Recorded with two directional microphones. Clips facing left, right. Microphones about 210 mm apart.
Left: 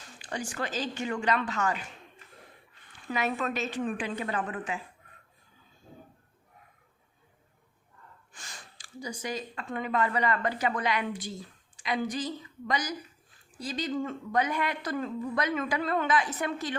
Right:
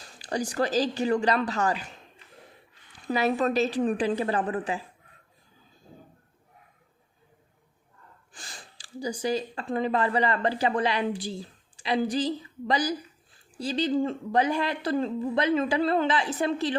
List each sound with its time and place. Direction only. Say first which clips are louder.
0.0 s speech: right 6 dB; 35° right (ahead or behind)
3.1 s speech: right 6 dB; 35° right (ahead or behind)
8.3 s speech: right 3 dB; 30° right (ahead or behind)